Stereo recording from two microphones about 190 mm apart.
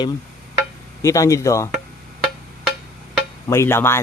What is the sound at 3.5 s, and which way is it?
Speech, 15° left (ahead or behind).